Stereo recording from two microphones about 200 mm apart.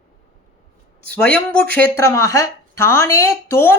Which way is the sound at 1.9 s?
15° left (ahead or behind).